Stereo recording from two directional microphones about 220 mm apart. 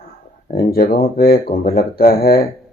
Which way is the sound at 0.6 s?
40° left (ahead or behind).